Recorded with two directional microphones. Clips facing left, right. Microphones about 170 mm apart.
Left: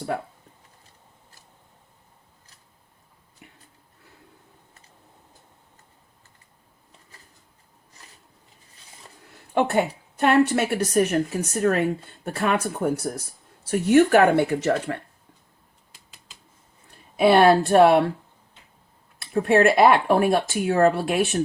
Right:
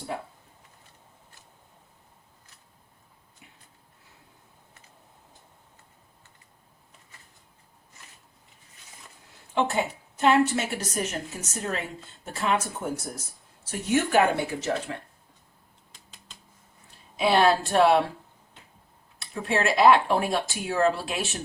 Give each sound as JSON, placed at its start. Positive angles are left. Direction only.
{"t": 3.4, "sound": "a sound", "side_deg": 60}
{"t": 9.6, "sound": "a woman's voice", "side_deg": 60}
{"t": 15.9, "sound": "typing", "side_deg": 5}
{"t": 17.2, "sound": "a woman's voice", "side_deg": 55}
{"t": 19.2, "sound": "a woman's voice", "side_deg": 55}